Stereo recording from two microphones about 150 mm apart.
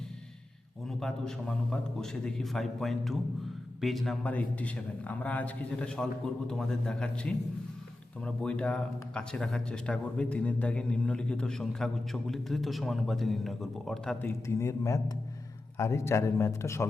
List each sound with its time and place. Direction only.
0.9 s a man's voice: 5° left (ahead or behind)